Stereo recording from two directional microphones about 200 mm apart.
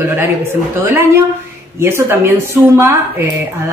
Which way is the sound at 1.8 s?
10° right (ahead or behind).